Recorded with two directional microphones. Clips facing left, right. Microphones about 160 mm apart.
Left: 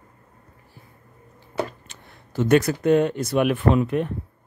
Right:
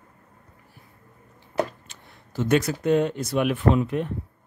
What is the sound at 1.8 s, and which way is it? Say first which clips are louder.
Speech: left 2 dB; 60° left (ahead or behind).